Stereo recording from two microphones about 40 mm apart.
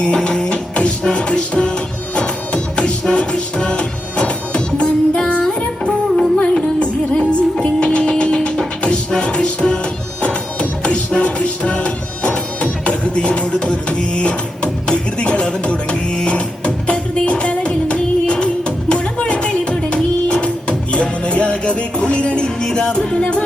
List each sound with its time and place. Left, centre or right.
0.0 s music: left